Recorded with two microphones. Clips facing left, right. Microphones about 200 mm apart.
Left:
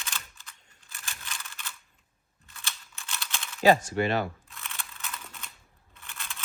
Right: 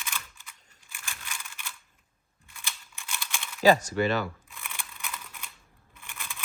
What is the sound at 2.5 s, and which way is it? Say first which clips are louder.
Scissors: even; 15° right (ahead or behind).